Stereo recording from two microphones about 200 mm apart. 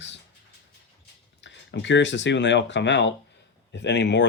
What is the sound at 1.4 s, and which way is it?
Speech, 65° left (ahead or behind).